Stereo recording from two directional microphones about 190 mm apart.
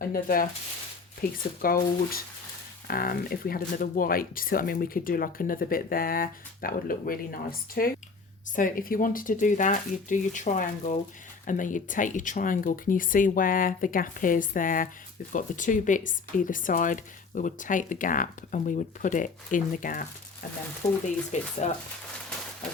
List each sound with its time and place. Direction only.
0.1 s speech: 50° left (ahead or behind)
21.3 s speech: 40° left (ahead or behind)